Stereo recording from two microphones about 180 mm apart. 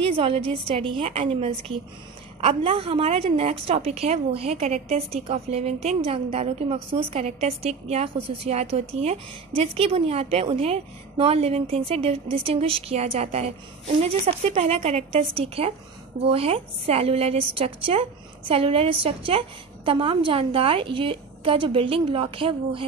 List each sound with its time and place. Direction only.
0.0 s a woman's voice: 30° right (ahead or behind)